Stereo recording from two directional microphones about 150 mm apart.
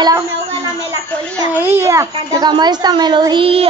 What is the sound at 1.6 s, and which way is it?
A child's voice, 15° right (ahead or behind).